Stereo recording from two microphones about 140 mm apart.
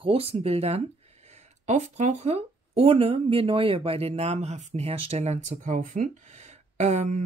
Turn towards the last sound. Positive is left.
turn(degrees=-55)  # may be behind; listen again after turning